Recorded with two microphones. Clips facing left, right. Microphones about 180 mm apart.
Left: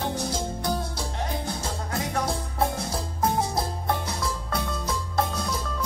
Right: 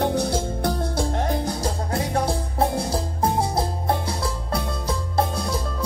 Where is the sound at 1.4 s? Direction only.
30° right (ahead or behind).